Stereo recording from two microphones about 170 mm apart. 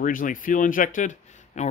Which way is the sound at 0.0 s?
50° left (ahead or behind).